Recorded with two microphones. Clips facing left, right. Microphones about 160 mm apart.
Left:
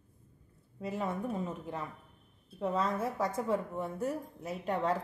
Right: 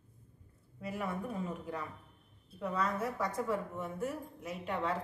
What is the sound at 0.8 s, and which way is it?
Speech, 25° left (ahead or behind).